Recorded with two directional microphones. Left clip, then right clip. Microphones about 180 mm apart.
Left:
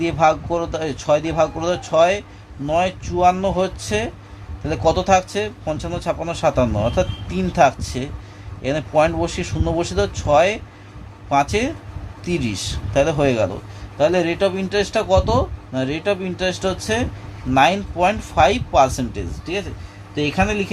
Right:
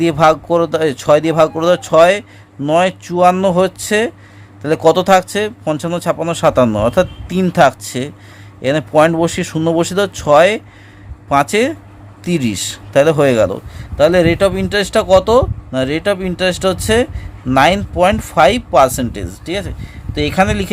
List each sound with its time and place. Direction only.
0.0 s speech: 55° right (ahead or behind)